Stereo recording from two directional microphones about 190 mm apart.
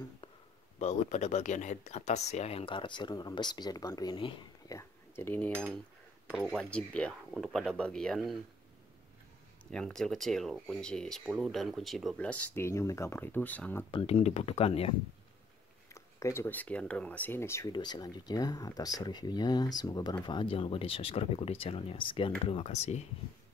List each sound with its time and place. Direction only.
0.7 s speech: 35° left (ahead or behind); by 8.4 s centre (ahead or behind)
9.7 s speech: 5° left (ahead or behind)
13.9 s speech: 35° left (ahead or behind)
15.9 s speech: 15° left (ahead or behind); by 23.0 s 35° left (ahead or behind)